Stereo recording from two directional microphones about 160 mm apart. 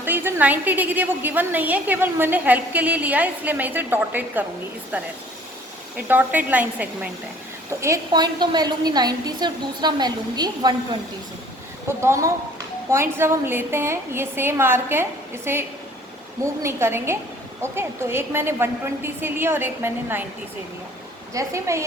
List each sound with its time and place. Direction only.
0.0 s a woman's voice: 15° right (ahead or behind)
6.1 s a woman's voice: 10° right (ahead or behind)
11.9 s a woman's voice: 15° right (ahead or behind)
21.3 s a woman's voice: 20° right (ahead or behind)